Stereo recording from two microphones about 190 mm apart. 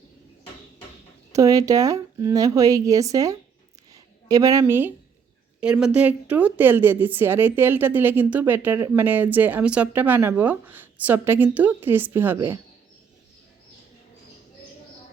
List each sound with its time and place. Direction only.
1.3 s a woman's voice: 20° right (ahead or behind)
3.9 s a sound: 20° right (ahead or behind)
4.6 s a woman's voice: 10° right (ahead or behind)